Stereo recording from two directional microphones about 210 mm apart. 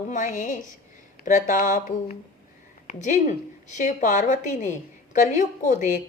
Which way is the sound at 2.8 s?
35° left (ahead or behind).